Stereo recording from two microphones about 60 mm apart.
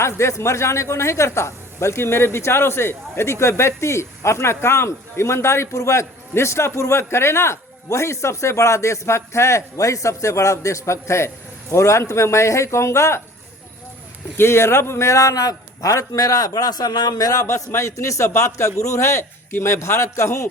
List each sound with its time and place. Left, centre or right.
0.0 s speech: left
14.3 s a man's voice: left
17.4 s a man's voice: left